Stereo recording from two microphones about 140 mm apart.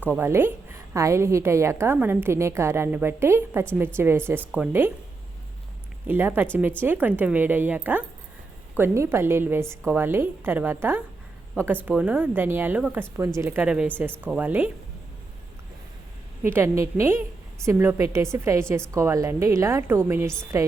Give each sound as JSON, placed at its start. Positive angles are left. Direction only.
{"t": 0.2, "sound": "a woman's voice", "side_deg": -15}
{"t": 6.1, "sound": "a woman's voice", "side_deg": -15}
{"t": 16.4, "sound": "a woman's voice", "side_deg": -15}